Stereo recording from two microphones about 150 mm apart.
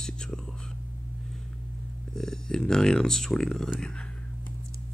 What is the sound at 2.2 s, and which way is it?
Speech, 5° left (ahead or behind).